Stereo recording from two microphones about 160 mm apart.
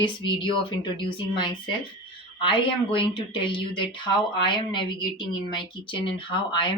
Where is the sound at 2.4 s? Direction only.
30° left (ahead or behind).